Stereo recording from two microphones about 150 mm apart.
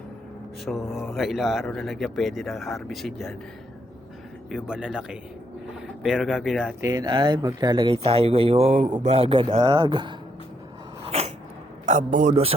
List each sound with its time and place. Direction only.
0.6 s speech: centre (ahead or behind)
4.4 s speech: 5° right (ahead or behind)
6.8 s speech: 25° right (ahead or behind)
11.9 s a man's voice: 55° right (ahead or behind)